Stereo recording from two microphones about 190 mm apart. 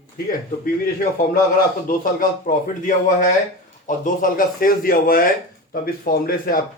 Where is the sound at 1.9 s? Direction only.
50° left (ahead or behind).